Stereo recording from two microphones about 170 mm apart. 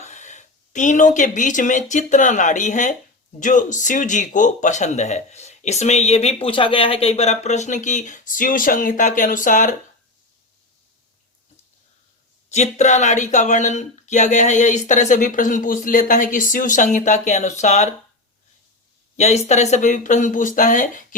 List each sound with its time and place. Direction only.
0.0 s speech: 45° left (ahead or behind)
12.5 s speech: 40° left (ahead or behind)
19.1 s speech: 40° left (ahead or behind)